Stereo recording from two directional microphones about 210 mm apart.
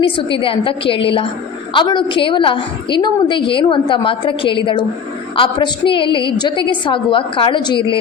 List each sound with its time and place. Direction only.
0.0 s a woman's voice: 25° left (ahead or behind)